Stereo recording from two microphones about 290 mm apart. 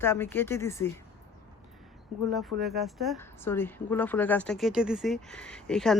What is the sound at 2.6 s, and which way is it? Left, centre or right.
Speech, right.